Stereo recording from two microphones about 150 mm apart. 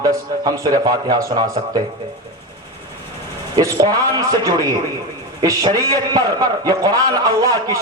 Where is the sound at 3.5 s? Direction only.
25° right (ahead or behind).